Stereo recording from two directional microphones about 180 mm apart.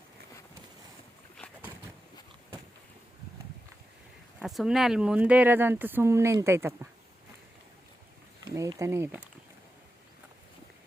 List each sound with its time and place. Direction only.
4.4 s speech: 5° right (ahead or behind)
8.5 s speech: 15° right (ahead or behind)